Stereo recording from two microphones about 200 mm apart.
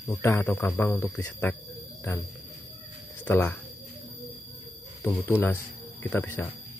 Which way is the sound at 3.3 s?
10° left (ahead or behind).